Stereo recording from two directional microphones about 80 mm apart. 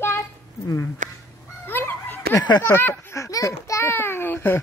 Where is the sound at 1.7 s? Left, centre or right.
Left.